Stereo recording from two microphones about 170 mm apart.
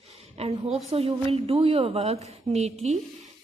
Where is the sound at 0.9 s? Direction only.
35° right (ahead or behind).